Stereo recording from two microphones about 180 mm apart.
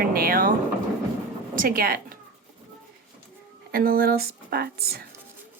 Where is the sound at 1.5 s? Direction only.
55° right (ahead or behind).